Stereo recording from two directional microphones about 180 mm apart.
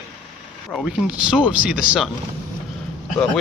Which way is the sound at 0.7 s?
Centre (ahead or behind).